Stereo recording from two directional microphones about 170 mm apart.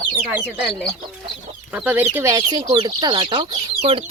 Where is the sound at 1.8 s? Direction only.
10° right (ahead or behind).